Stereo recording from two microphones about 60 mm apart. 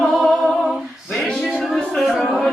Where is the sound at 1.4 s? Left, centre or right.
Centre.